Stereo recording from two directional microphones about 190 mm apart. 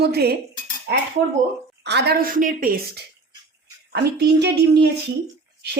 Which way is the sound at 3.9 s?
60° right (ahead or behind).